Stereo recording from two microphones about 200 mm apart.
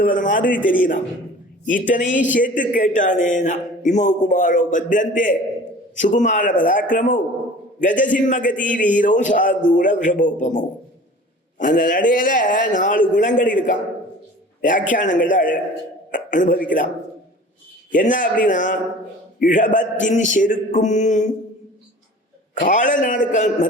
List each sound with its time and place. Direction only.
0.0 s a man's voice: 40° left (ahead or behind)
1.6 s a man's voice: 40° left (ahead or behind)
17.9 s a man's voice: 40° left (ahead or behind)
22.6 s a man's voice: 40° left (ahead or behind)